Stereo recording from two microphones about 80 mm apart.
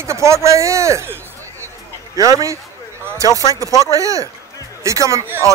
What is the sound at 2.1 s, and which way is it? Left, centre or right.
Speech, right.